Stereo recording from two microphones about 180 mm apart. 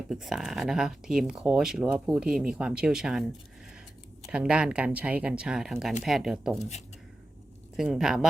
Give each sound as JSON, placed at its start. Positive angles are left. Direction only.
{"t": 0.1, "sound": "speech", "side_deg": 0}
{"t": 4.3, "sound": "speech", "side_deg": -5}
{"t": 7.8, "sound": "speech", "side_deg": -5}